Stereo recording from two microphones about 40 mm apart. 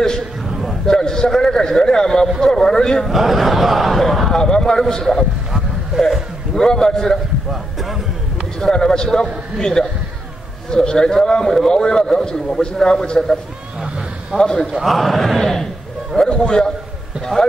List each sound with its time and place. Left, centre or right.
0.8 s a man's voice: centre
3.1 s speech: centre
4.4 s a man's voice: centre
5.9 s a sound: centre
6.5 s a man's voice: centre
8.7 s a man's voice: centre
14.4 s a man's voice: centre
14.8 s a man's voice: centre